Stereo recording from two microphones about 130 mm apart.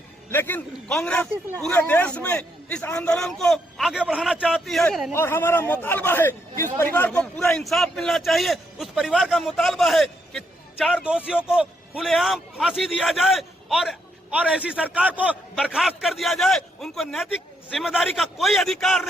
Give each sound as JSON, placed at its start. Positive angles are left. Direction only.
{"t": 0.3, "sound": "a man's voice", "side_deg": 15}
{"t": 5.1, "sound": "a man's voice", "side_deg": 20}